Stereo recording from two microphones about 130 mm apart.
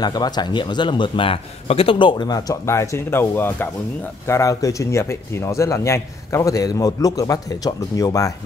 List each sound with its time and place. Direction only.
0.0 s a man's voice: 30° left (ahead or behind)